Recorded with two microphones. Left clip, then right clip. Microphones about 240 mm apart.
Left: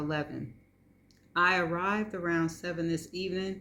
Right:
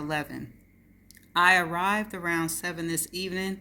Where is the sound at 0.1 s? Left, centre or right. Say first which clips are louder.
Right 3 dB; right.